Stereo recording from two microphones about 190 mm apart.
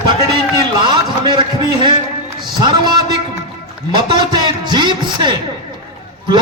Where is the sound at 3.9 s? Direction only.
25° right (ahead or behind).